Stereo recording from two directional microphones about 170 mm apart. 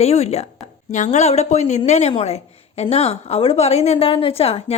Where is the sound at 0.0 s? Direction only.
40° left (ahead or behind).